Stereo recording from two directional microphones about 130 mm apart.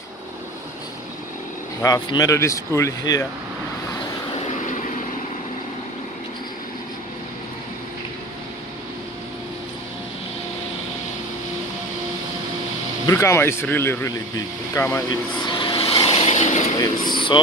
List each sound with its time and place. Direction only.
1.8 s speech: 25° left (ahead or behind)
4.5 s vehicle: 75° left (ahead or behind)
13.0 s speech: 20° left (ahead or behind)
15.6 s vehicle: 40° left (ahead or behind); by 16.6 s 60° left (ahead or behind)
16.8 s speech: 35° left (ahead or behind)